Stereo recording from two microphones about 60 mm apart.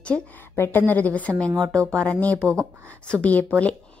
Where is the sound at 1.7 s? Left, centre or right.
Right.